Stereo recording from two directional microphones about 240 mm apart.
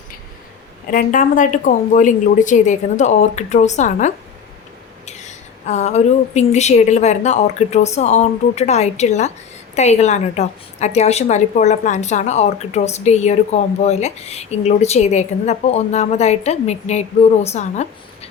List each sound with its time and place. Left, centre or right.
0.9 s a woman's voice: left